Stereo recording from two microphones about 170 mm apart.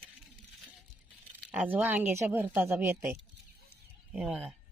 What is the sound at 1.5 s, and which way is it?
Speech, 10° right (ahead or behind).